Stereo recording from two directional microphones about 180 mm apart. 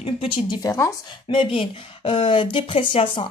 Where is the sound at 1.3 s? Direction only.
30° left (ahead or behind).